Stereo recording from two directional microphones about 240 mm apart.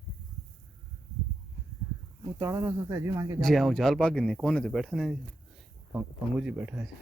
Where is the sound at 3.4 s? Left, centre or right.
Centre.